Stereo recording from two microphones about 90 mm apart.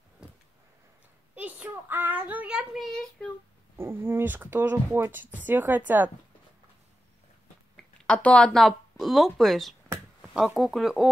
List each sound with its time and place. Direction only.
1.3 s child singing: 15° right (ahead or behind); by 3.3 s 5° left (ahead or behind)
3.7 s speech: 25° right (ahead or behind)
7.7 s a sound: 15° left (ahead or behind)
8.6 s speech: centre (ahead or behind)